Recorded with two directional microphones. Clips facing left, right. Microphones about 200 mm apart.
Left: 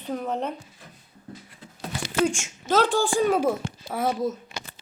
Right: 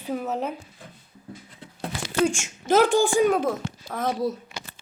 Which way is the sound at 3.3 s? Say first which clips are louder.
Left 1 dB; 10° left (ahead or behind).